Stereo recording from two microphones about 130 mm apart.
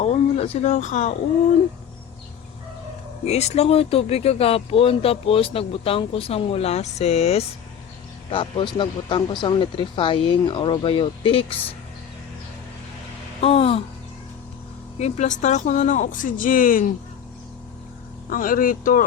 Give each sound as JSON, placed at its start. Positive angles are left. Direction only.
{"t": 0.0, "sound": "a sound", "side_deg": 55}
{"t": 3.2, "sound": "speech", "side_deg": 55}
{"t": 8.3, "sound": "speech", "side_deg": 40}
{"t": 13.4, "sound": "speech", "side_deg": 50}
{"t": 14.9, "sound": "speech", "side_deg": 60}
{"t": 18.3, "sound": "speech", "side_deg": 90}